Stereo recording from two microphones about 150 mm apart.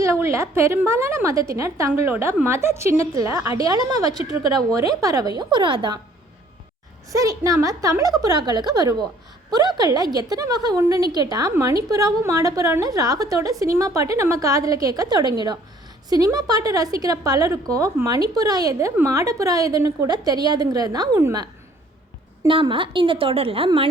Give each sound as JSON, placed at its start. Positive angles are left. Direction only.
{"t": 0.0, "sound": "a woman's voice", "side_deg": -20}
{"t": 7.1, "sound": "a woman's voice", "side_deg": -20}
{"t": 22.4, "sound": "a woman's voice", "side_deg": -35}